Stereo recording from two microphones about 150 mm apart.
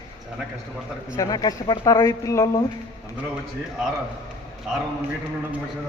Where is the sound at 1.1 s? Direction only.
25° left (ahead or behind).